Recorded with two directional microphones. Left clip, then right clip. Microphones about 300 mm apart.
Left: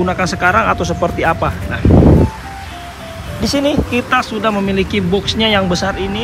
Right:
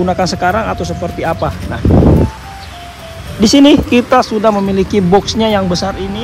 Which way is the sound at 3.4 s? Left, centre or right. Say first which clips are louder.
Right 8 dB; right.